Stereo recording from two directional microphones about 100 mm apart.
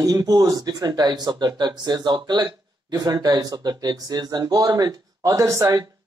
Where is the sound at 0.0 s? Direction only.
35° right (ahead or behind).